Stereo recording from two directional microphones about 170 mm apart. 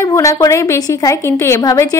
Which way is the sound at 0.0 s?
20° left (ahead or behind).